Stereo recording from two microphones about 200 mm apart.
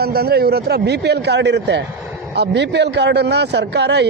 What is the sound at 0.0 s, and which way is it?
A man's voice, 50° right (ahead or behind).